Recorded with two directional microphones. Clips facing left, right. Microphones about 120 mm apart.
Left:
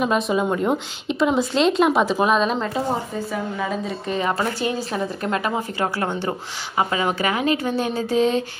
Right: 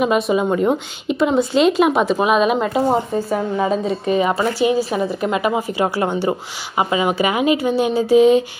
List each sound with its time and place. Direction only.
0.0 s speech: 5° right (ahead or behind)
3.3 s a woman's voice: 30° right (ahead or behind)
4.2 s speech: 10° right (ahead or behind)